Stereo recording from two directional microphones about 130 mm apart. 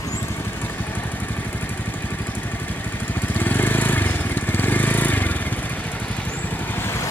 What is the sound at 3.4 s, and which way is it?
Vehicle, 15° left (ahead or behind).